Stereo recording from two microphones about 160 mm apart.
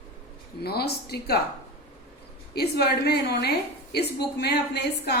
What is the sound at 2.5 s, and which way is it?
A woman's voice, 90° left.